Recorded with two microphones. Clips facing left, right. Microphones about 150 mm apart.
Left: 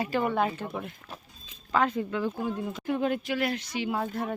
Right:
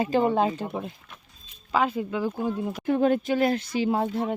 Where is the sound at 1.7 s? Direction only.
10° right (ahead or behind).